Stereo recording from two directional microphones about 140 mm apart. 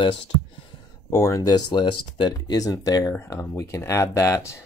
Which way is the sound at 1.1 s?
25° left (ahead or behind).